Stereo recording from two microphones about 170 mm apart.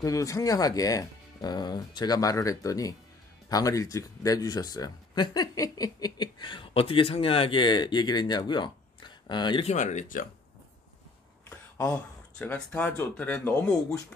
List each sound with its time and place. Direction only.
0.0 s speech: 20° left (ahead or behind)
9.7 s speech: 45° left (ahead or behind)
11.4 s speech: 10° left (ahead or behind)